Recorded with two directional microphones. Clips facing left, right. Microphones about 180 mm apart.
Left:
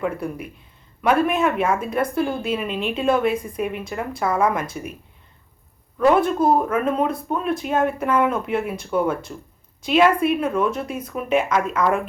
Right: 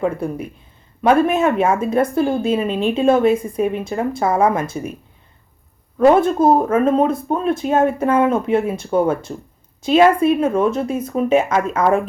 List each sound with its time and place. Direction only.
0.0 s speech: 30° right (ahead or behind)
6.5 s a woman's voice: 30° right (ahead or behind)